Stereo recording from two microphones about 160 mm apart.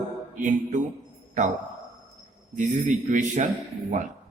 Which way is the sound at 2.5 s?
50° right (ahead or behind).